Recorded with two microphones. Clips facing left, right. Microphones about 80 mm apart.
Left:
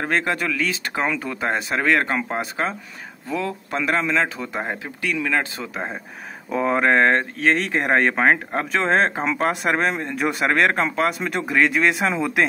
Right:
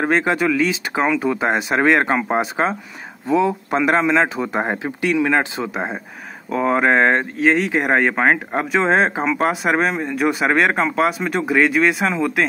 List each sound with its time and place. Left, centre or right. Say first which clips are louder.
0.0 s a man's voice: right 5 dB; centre
6.5 s speech: right 2 dB; centre